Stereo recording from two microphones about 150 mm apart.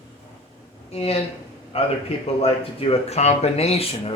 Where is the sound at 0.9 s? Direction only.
45° left (ahead or behind).